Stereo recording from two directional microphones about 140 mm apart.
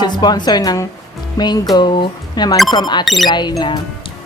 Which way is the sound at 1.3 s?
30° left (ahead or behind).